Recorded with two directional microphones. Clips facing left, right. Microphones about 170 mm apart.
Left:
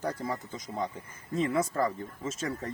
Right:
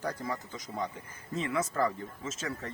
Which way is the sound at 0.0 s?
30° left (ahead or behind).